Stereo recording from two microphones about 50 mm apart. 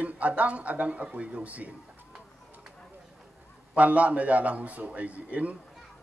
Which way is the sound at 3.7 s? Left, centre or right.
Right.